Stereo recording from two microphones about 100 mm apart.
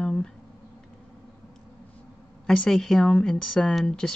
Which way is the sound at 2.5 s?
5° left (ahead or behind).